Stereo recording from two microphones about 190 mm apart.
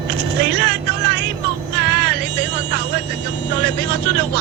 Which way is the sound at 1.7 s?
60° right (ahead or behind).